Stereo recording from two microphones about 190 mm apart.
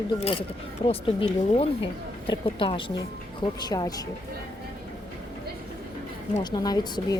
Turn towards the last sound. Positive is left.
turn(degrees=20)  # may be behind; listen again after turning